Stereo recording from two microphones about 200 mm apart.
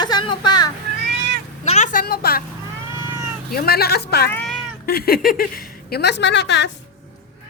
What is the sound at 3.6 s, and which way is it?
Speech, 50° left (ahead or behind).